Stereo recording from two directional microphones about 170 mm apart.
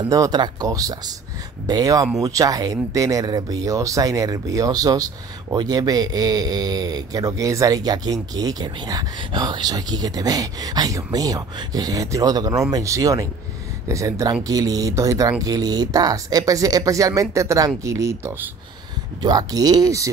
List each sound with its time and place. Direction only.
0.0 s speech: 20° right (ahead or behind)